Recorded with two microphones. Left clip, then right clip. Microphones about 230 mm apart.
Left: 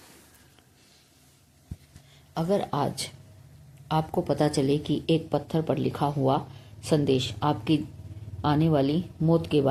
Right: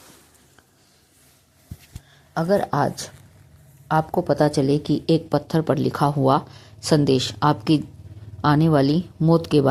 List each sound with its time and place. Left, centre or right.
2.3 s a woman's voice: right